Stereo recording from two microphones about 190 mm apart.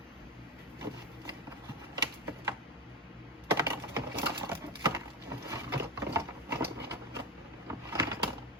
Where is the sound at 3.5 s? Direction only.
15° right (ahead or behind).